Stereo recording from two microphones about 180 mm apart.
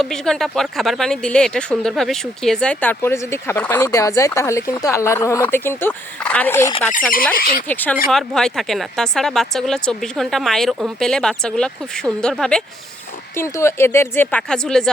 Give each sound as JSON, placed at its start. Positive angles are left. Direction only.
{"t": 0.0, "sound": "speech", "side_deg": 5}
{"t": 7.3, "sound": "speech", "side_deg": 50}
{"t": 7.7, "sound": "speech", "side_deg": 10}
{"t": 13.3, "sound": "speech", "side_deg": 15}